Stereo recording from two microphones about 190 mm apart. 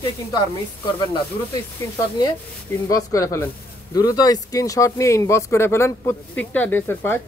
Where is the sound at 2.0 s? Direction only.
20° left (ahead or behind).